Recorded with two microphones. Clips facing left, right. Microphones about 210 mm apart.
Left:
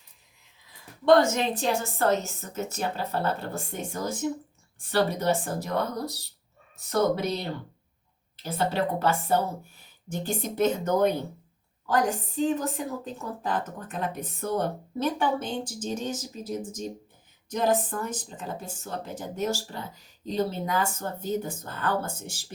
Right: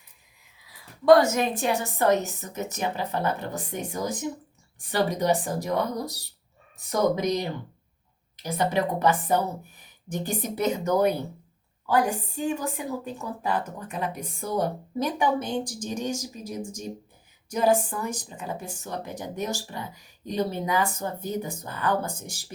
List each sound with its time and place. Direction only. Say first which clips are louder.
1.6 s speech: right 2 dB; 15° right (ahead or behind)